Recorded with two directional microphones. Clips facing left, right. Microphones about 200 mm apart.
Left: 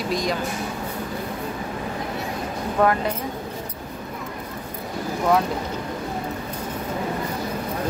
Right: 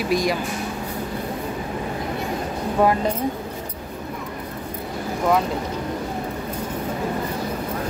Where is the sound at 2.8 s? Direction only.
15° right (ahead or behind).